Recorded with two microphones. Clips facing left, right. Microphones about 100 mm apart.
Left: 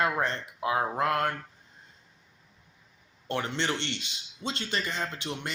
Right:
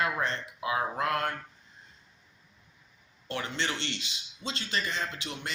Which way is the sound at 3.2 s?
45° left (ahead or behind).